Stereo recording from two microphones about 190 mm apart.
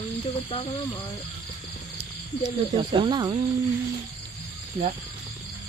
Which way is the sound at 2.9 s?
25° right (ahead or behind).